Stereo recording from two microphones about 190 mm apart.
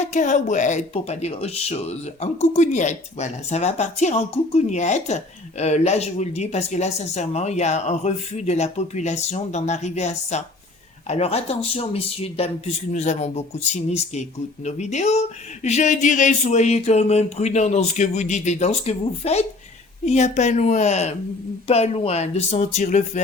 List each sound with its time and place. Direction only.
0.0 s speech: 40° left (ahead or behind)